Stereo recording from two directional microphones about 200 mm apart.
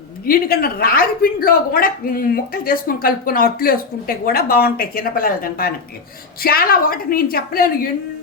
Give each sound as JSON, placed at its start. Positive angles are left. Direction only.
{"t": 0.3, "sound": "a woman's voice", "side_deg": 50}